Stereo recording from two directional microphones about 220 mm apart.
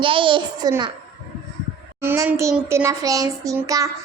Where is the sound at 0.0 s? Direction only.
20° right (ahead or behind).